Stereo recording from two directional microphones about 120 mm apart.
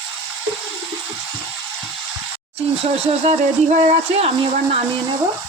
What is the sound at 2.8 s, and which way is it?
Speech, 60° right (ahead or behind).